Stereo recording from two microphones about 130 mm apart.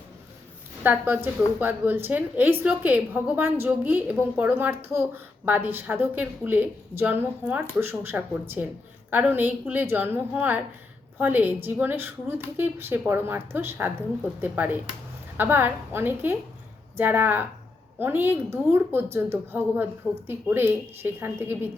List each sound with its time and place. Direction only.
0.8 s a woman's voice: 15° right (ahead or behind)